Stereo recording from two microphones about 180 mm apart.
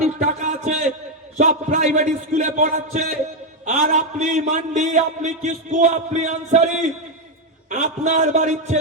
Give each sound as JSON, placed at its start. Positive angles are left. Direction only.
{"t": 0.0, "sound": "a sound", "side_deg": -40}
{"t": 1.4, "sound": "a man's voice", "side_deg": -45}
{"t": 7.7, "sound": "a man's voice", "side_deg": -45}